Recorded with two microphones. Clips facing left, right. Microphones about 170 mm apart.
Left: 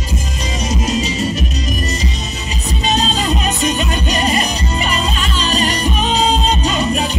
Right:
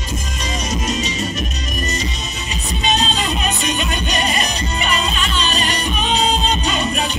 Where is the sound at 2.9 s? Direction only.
35° left (ahead or behind).